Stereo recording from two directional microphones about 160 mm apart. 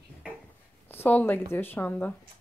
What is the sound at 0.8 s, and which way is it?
A woman's voice, 10° left (ahead or behind).